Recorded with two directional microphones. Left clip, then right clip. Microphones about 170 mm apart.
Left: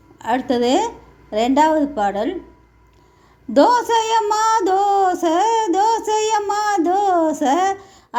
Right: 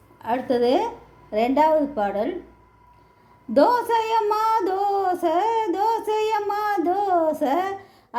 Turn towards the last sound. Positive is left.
turn(degrees=30)  # may be behind; listen again after turning